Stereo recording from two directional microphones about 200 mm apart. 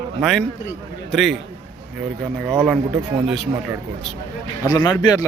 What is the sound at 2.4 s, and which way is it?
Speech, 5° right (ahead or behind).